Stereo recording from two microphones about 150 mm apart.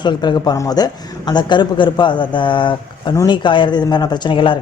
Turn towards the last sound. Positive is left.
turn(degrees=35)  # may be behind; listen again after turning